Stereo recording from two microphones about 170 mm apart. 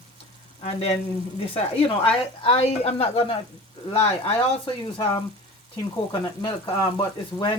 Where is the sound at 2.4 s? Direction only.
35° left (ahead or behind).